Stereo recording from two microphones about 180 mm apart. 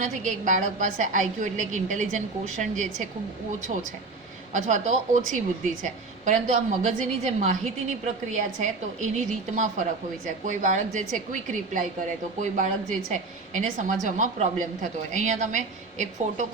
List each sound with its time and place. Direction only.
0.0 s a woman's voice: 45° right (ahead or behind)
4.5 s a woman's voice: 45° right (ahead or behind)
13.1 s a woman's voice: 45° right (ahead or behind)